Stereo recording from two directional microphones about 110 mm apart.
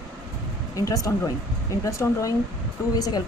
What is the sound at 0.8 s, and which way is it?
Speech, 30° left (ahead or behind).